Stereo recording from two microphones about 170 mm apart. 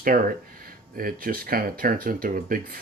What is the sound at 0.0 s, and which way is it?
Speech, 55° right (ahead or behind).